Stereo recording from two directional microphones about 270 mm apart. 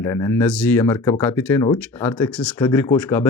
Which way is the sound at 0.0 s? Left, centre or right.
Centre.